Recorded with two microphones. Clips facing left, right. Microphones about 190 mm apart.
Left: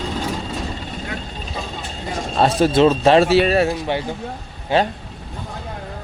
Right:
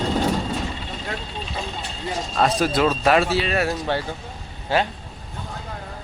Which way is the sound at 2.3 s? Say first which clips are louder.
Left 5 dB; 25° left (ahead or behind).